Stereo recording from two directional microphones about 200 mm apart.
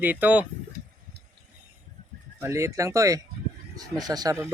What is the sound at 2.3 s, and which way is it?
A man's voice, 15° right (ahead or behind).